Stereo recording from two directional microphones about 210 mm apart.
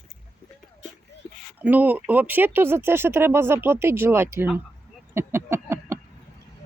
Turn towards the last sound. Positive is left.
turn(degrees=-10)  # may be behind; listen again after turning